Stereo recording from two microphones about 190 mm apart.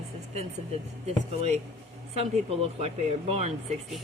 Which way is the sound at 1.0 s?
30° right (ahead or behind).